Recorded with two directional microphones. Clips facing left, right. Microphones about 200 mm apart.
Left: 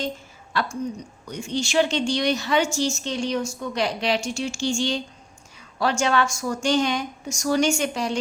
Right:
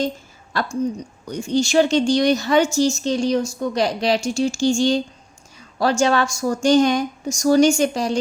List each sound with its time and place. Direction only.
0.5 s a woman's voice: 40° right (ahead or behind)